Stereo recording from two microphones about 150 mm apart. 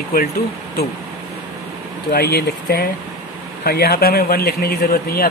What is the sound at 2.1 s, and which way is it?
Speech, 90° left.